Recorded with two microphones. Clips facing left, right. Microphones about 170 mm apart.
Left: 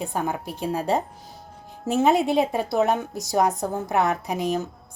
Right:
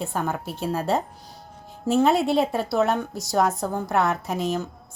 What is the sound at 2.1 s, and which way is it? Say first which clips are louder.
Speech: even; centre (ahead or behind).